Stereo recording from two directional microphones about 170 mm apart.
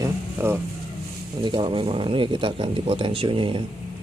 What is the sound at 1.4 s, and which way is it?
Speech, 30° right (ahead or behind).